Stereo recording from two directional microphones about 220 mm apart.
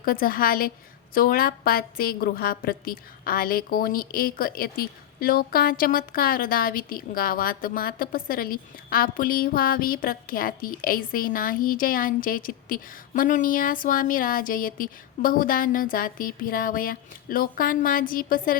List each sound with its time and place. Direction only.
0.0 s a woman's voice: 40° left (ahead or behind)